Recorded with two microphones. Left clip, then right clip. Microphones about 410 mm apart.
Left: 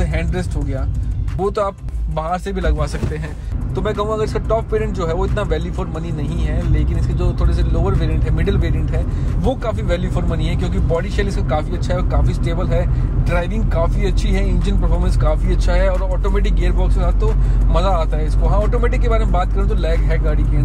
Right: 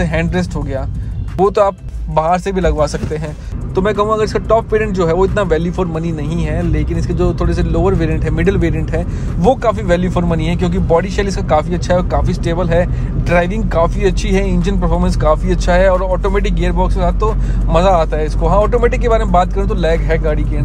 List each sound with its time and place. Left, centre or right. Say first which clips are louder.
0.0 s speech: right 7 dB; centre